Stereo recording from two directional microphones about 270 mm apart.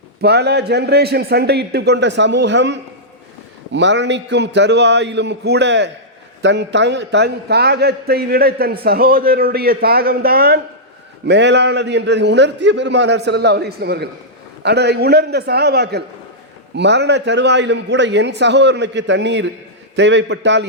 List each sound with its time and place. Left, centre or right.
0.2 s a man's voice: right